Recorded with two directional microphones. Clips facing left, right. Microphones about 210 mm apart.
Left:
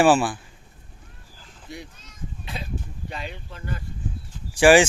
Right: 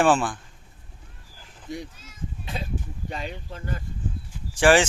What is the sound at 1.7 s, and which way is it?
Speech, 45° right (ahead or behind).